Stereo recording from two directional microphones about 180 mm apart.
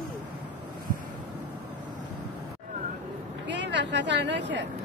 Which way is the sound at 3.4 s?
75° right (ahead or behind).